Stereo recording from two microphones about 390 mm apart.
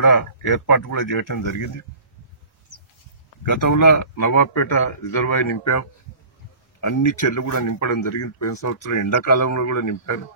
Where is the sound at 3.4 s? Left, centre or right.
Left.